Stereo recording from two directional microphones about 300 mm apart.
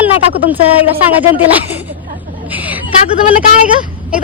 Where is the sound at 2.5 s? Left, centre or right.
Centre.